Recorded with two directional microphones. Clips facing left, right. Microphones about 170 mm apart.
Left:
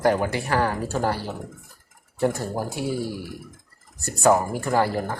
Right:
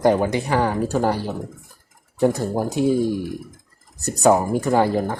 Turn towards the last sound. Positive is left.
turn(degrees=-20)  # may be behind; listen again after turning